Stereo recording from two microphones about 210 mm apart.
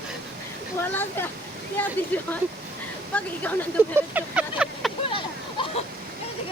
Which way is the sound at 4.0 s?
5° right (ahead or behind).